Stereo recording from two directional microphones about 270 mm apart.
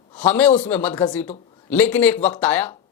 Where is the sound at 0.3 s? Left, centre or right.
Centre.